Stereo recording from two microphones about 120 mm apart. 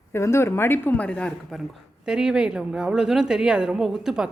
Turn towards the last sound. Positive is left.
turn(degrees=-5)  # may be behind; listen again after turning